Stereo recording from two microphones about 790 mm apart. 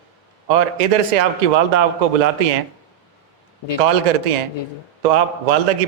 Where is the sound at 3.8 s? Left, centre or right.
Right.